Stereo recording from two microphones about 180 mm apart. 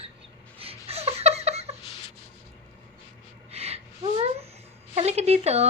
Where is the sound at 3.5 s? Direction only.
35° right (ahead or behind).